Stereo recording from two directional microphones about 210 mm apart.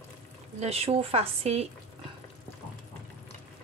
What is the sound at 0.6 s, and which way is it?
Speech, 30° right (ahead or behind).